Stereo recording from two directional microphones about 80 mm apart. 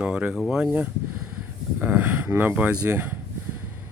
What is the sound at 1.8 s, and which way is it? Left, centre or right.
Speech, centre.